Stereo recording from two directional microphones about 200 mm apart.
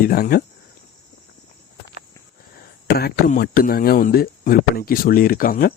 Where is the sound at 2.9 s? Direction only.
50° left (ahead or behind).